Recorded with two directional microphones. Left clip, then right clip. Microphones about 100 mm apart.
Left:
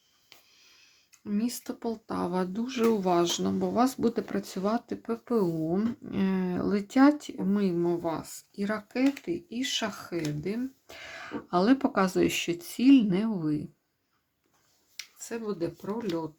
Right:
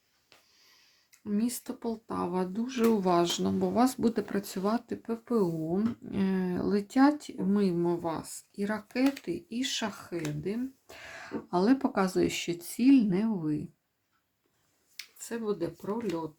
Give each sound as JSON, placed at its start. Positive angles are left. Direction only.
{"t": 0.3, "sound": "a sound", "side_deg": 35}
{"t": 1.2, "sound": "speech", "side_deg": 25}
{"t": 1.8, "sound": "speech", "side_deg": 40}
{"t": 2.9, "sound": "speech", "side_deg": 5}
{"t": 7.5, "sound": "speech", "side_deg": 15}
{"t": 9.9, "sound": "speech", "side_deg": 30}
{"t": 12.9, "sound": "speech", "side_deg": 30}
{"t": 14.9, "sound": "speech", "side_deg": 15}